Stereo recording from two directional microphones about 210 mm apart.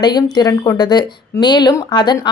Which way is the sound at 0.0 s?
20° left (ahead or behind).